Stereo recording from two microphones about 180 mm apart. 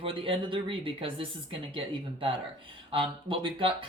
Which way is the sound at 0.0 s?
30° right (ahead or behind).